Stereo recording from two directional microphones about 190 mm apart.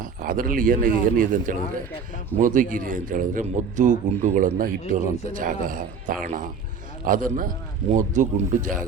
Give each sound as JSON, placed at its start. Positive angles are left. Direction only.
{"t": 0.0, "sound": "a man's voice", "side_deg": -45}